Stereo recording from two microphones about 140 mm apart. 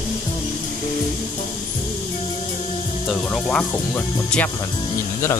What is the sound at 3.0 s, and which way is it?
Speech, 5° left (ahead or behind).